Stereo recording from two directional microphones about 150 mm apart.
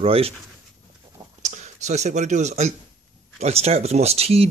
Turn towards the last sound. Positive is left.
turn(degrees=-40)  # may be behind; listen again after turning